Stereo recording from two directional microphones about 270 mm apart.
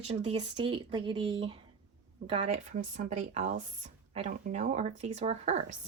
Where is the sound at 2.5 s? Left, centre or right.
Right.